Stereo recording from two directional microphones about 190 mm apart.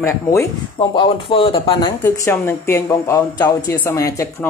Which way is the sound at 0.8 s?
25° left (ahead or behind).